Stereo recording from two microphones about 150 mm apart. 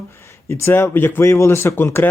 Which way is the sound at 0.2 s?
15° left (ahead or behind).